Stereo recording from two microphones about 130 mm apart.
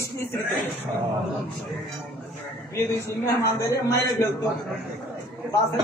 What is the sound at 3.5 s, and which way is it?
Speech, 25° left (ahead or behind).